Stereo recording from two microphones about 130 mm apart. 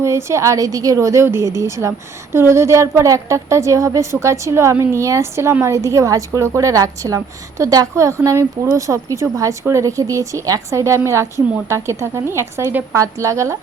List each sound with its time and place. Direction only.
0.0 s a woman's voice: 20° right (ahead or behind)